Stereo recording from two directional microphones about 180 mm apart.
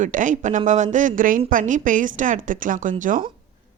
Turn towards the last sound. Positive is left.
turn(degrees=-45)  # may be behind; listen again after turning